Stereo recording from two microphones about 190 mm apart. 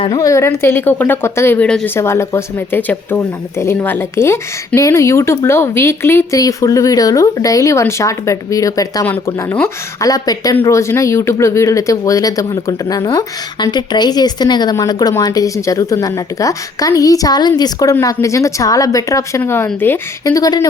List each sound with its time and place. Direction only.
0.0 s speech: 20° left (ahead or behind)